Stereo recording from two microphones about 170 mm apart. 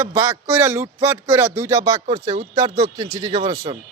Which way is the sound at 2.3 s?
45° right (ahead or behind).